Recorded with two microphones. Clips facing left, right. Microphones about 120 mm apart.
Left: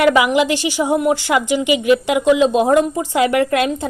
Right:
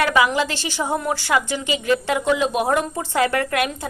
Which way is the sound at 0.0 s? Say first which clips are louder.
Left 5 dB; 20° left (ahead or behind).